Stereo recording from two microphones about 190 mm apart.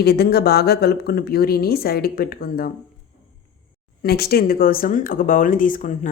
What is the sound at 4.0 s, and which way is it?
Speech, 55° left (ahead or behind).